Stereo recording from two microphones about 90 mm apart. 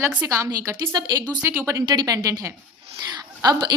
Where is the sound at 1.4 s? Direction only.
30° right (ahead or behind).